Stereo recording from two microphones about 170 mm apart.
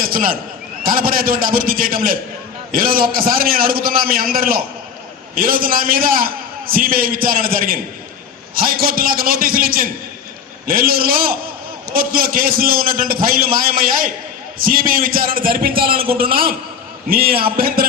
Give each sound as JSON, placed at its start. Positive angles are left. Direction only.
{"t": 0.0, "sound": "a man's voice", "side_deg": -55}